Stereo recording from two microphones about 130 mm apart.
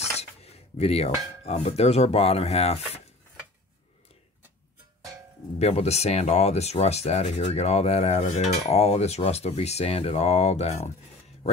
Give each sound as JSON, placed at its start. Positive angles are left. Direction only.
{"t": 0.2, "sound": "speech", "side_deg": 55}
{"t": 5.6, "sound": "speech", "side_deg": 55}